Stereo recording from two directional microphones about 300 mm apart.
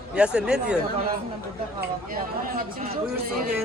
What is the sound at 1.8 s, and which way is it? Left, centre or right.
Speech, right.